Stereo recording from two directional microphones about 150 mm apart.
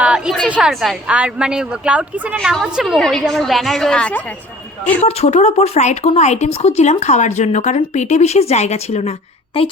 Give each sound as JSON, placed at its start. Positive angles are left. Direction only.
{"t": 0.0, "sound": "a sound", "side_deg": -5}
{"t": 0.4, "sound": "a woman's voice", "side_deg": -5}
{"t": 5.0, "sound": "speech", "side_deg": 45}